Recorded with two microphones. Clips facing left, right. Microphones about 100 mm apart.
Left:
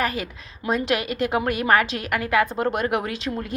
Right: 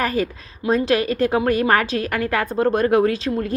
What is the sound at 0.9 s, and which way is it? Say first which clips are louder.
A woman's voice: right 5 dB; 40° right (ahead or behind).